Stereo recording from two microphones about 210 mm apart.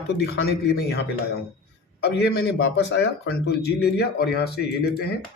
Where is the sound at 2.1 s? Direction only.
50° left (ahead or behind).